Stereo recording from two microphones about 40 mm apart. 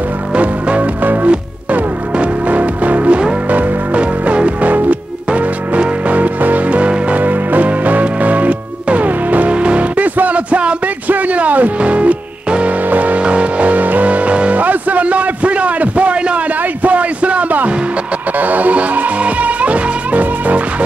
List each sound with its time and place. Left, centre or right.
0.3 s music: right
9.5 s music: right
11.1 s music: right
13.2 s music: right
14.6 s a sound: right
18.4 s music: right